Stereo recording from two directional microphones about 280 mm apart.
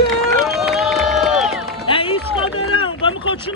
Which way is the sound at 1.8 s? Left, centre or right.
Centre.